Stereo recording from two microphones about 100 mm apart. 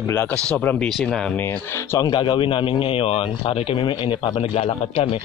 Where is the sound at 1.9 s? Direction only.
50° left (ahead or behind); by 5.1 s 90° left.